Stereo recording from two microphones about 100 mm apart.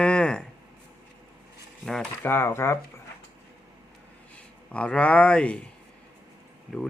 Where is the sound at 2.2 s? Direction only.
25° left (ahead or behind).